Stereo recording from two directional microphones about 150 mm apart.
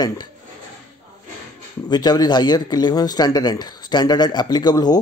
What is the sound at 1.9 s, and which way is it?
Speech, 25° left (ahead or behind).